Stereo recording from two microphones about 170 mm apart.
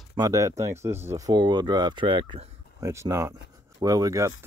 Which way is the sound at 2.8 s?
15° right (ahead or behind).